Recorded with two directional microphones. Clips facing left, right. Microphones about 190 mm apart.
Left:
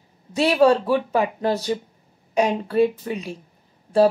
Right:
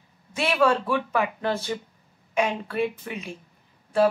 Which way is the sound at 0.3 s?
35° left (ahead or behind).